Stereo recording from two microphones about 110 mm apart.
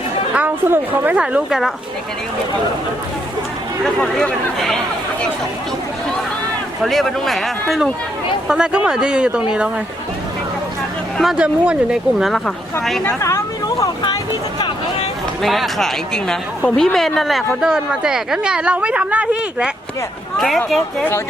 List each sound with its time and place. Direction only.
0.3 s speech: 15° right (ahead or behind)
3.8 s speech: 10° left (ahead or behind)
6.8 s speech: centre (ahead or behind)
11.2 s speech: 5° right (ahead or behind)
13.1 s speech: 25° left (ahead or behind)
15.4 s speech: centre (ahead or behind)